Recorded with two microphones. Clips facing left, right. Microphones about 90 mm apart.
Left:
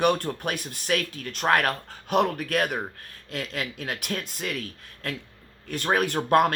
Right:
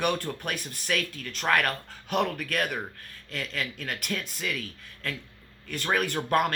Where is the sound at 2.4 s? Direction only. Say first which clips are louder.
Left 4 dB; 45° left (ahead or behind).